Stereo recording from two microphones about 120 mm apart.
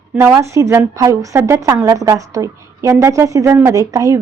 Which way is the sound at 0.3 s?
25° right (ahead or behind).